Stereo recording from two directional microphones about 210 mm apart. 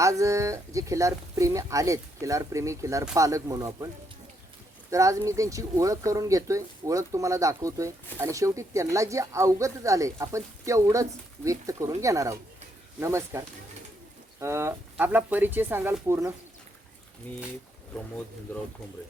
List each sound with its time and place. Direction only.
0.0 s speech: 15° right (ahead or behind)
4.9 s speech: 15° right (ahead or behind)
17.9 s speech: centre (ahead or behind)